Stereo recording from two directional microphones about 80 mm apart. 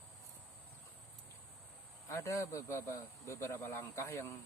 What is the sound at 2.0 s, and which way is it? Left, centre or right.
A man's voice, left.